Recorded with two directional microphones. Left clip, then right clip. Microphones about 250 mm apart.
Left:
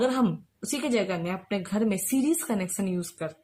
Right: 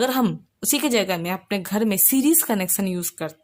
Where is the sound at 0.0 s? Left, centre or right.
Right.